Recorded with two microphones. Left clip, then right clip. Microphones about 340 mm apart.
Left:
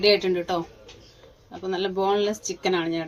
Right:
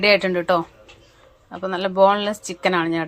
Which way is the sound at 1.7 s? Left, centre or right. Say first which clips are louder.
Right 7 dB; right.